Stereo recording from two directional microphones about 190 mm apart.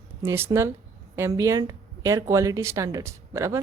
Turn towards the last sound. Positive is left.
turn(degrees=-15)  # may be behind; listen again after turning